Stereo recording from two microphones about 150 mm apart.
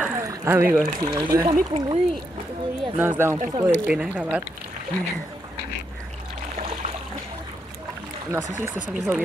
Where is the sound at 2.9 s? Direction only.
15° right (ahead or behind).